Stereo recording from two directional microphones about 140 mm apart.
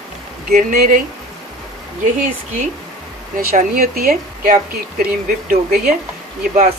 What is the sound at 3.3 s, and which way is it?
Speech, 90° right.